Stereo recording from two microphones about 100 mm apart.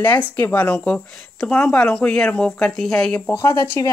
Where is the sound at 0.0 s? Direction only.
20° left (ahead or behind).